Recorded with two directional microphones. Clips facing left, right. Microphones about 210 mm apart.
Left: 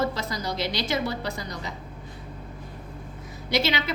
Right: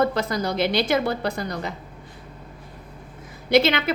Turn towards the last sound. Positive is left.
turn(degrees=-55)  # may be behind; listen again after turning